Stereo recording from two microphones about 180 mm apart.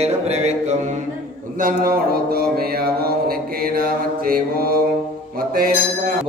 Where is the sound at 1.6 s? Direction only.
55° right (ahead or behind).